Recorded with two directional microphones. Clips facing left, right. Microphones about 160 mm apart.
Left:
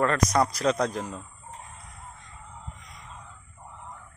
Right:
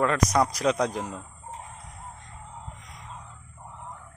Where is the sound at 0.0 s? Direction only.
10° right (ahead or behind).